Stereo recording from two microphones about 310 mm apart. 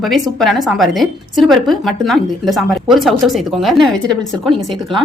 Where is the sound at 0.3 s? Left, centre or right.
Centre.